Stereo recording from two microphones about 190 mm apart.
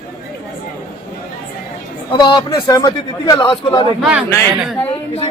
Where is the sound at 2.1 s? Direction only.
25° left (ahead or behind).